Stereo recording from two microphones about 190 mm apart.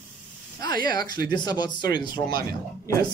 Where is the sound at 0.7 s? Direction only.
50° right (ahead or behind).